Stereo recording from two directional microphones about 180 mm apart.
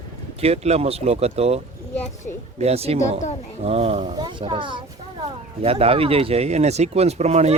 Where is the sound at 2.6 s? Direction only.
35° right (ahead or behind).